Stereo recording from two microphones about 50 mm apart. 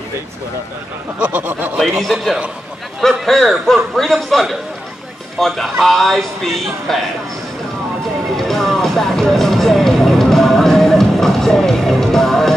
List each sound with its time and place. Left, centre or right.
1.2 s speech: right
1.8 s a man's voice: centre
8.4 s music: centre